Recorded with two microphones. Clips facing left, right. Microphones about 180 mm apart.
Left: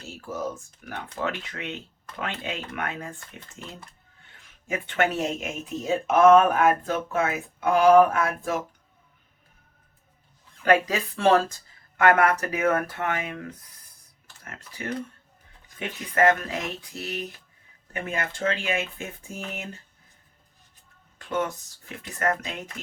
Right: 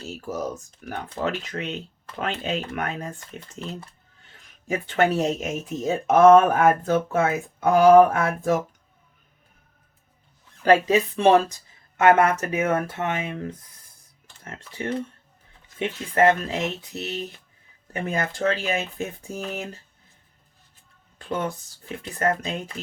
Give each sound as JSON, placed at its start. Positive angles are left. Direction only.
{"t": 0.1, "sound": "speech", "side_deg": -40}
{"t": 4.7, "sound": "speech", "side_deg": -35}
{"t": 10.6, "sound": "speech", "side_deg": -30}
{"t": 17.9, "sound": "speech", "side_deg": -35}
{"t": 21.2, "sound": "speech", "side_deg": -30}